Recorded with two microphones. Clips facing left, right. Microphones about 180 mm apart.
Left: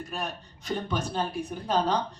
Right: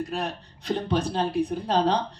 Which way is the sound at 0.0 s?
35° right (ahead or behind).